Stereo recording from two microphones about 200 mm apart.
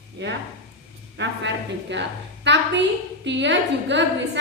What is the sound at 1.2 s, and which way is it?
A woman's voice, 60° right (ahead or behind).